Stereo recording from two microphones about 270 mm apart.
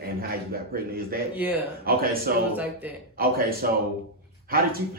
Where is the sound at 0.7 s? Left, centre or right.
Right.